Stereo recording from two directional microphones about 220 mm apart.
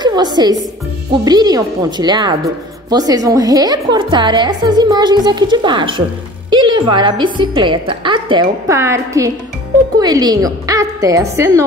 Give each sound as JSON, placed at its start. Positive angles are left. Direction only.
{"t": 0.0, "sound": "a woman's voice", "side_deg": -20}